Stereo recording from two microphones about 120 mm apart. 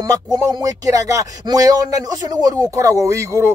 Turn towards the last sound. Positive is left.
turn(degrees=-25)  # may be behind; listen again after turning